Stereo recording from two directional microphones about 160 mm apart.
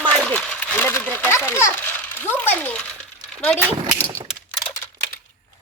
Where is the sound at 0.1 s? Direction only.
5° left (ahead or behind).